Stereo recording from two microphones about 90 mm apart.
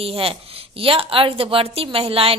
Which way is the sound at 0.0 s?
90° right.